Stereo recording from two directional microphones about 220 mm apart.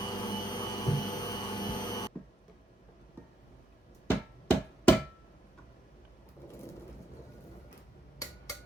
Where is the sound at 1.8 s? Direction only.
15° left (ahead or behind).